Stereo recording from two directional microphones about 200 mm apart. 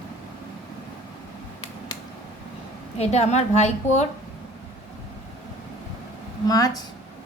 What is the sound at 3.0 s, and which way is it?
A woman's voice, 35° left (ahead or behind).